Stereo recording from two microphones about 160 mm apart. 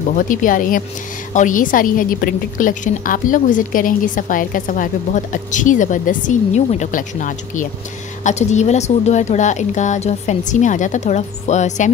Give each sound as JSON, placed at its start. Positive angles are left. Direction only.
{"t": 0.1, "sound": "a woman's voice", "side_deg": 55}